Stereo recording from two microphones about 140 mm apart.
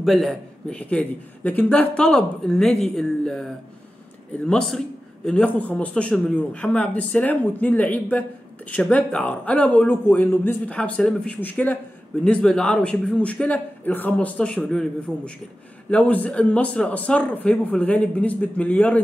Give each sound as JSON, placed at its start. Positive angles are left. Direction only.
{"t": 0.0, "sound": "a man's voice", "side_deg": 0}
{"t": 4.5, "sound": "a man's voice", "side_deg": 5}